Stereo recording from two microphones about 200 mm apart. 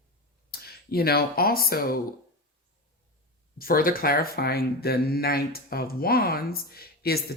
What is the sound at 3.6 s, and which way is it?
Speech, 45° left (ahead or behind).